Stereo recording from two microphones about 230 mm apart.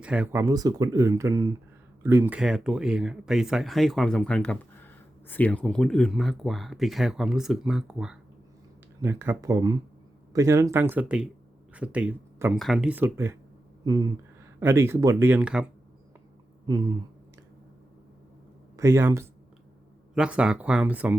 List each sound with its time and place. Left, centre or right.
0.0 s speech: centre
18.8 s speech: centre